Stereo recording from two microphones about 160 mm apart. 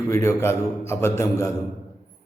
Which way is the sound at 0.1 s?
15° left (ahead or behind).